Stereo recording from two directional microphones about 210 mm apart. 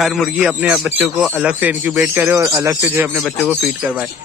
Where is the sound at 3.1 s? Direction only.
Centre (ahead or behind).